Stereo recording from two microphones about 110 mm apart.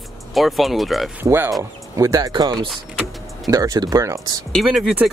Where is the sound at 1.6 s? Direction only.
30° right (ahead or behind).